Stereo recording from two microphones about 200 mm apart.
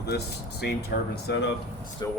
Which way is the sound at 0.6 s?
55° left (ahead or behind).